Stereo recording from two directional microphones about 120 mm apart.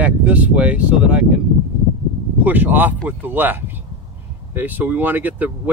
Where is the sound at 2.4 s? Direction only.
15° right (ahead or behind).